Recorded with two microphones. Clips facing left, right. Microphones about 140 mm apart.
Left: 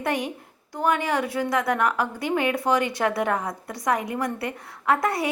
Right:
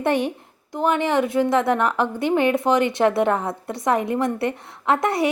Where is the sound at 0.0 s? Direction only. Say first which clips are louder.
Right 6 dB; 30° right (ahead or behind).